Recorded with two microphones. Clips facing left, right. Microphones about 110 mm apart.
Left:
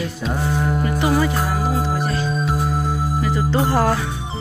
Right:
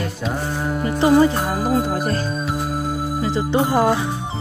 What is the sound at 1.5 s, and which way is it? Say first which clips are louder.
Music: right 2 dB; 45° right (ahead or behind).